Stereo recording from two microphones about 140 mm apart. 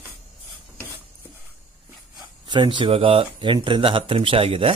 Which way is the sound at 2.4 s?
35° right (ahead or behind).